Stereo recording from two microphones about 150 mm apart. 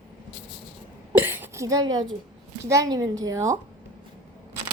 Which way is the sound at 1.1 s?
15° right (ahead or behind).